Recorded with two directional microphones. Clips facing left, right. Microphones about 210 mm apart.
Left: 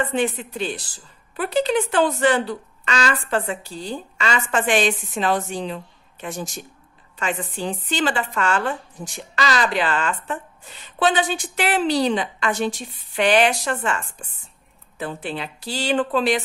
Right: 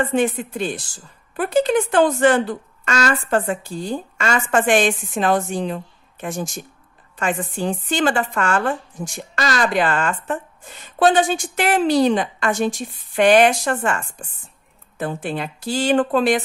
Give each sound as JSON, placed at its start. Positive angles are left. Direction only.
{"t": 0.0, "sound": "a woman's voice", "side_deg": -45}